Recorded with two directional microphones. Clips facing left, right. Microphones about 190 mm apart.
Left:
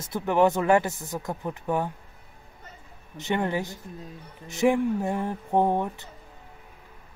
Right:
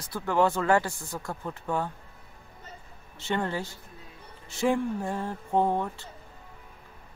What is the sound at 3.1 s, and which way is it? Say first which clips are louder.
Speech: left 3 dB; 15° left (ahead or behind).